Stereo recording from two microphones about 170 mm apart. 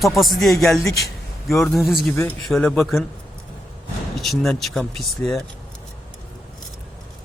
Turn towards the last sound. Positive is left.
turn(degrees=0)  # may be behind; listen again after turning